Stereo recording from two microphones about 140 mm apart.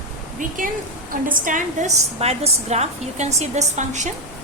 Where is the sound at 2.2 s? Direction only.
50° right (ahead or behind).